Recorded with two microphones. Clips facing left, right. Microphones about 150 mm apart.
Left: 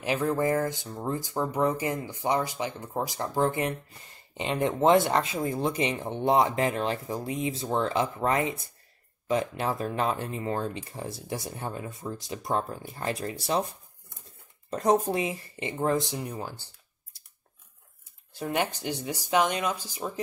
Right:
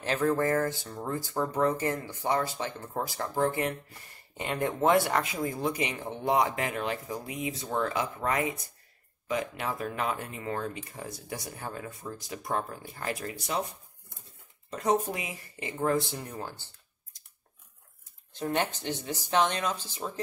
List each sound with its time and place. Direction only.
0.0 s speech: 10° left (ahead or behind); by 13.7 s 30° left (ahead or behind)
14.7 s speech: 35° left (ahead or behind); by 16.6 s 15° left (ahead or behind)
18.3 s speech: 10° left (ahead or behind)